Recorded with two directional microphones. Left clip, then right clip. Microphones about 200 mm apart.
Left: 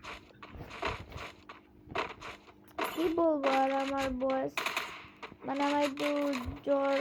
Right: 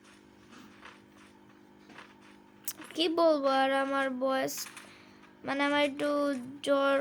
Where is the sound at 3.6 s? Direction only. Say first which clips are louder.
Right 2 dB; 20° right (ahead or behind).